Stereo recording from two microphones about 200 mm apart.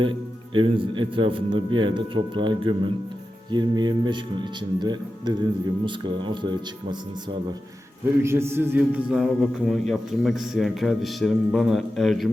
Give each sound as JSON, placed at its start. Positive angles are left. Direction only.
{"t": 0.5, "sound": "a man's voice", "side_deg": -25}
{"t": 8.2, "sound": "a man's voice", "side_deg": -10}